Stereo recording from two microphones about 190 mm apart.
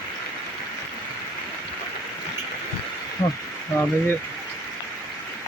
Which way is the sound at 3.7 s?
10° left (ahead or behind).